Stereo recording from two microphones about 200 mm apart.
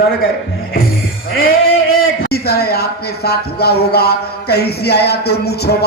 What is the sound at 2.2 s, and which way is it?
Speech, 50° left (ahead or behind).